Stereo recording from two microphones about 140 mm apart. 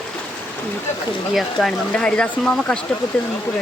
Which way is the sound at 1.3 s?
Centre (ahead or behind).